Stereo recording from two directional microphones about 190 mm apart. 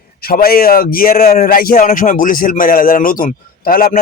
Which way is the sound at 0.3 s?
50° left (ahead or behind).